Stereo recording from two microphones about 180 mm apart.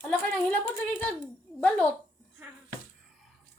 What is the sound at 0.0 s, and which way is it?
A woman's voice, 10° left (ahead or behind).